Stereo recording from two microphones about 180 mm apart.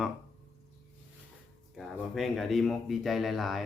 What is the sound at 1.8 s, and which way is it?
Speech, centre (ahead or behind).